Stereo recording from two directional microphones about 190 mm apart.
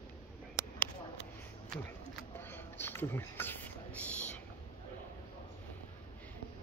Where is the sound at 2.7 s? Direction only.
10° left (ahead or behind).